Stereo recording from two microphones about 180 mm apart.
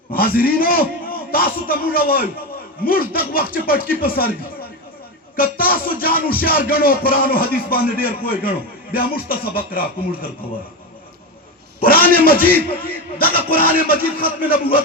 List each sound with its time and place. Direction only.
0.1 s music: 55° left (ahead or behind)
5.4 s music: 55° left (ahead or behind)
11.8 s a man's voice: 55° left (ahead or behind)